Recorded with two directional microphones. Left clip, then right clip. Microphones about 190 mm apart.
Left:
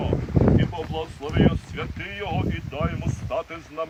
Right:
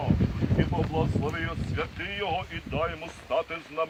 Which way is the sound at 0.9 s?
15° left (ahead or behind).